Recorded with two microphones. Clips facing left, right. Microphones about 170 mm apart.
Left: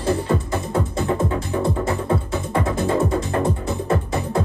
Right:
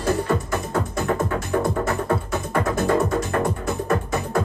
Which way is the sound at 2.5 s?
25° left (ahead or behind).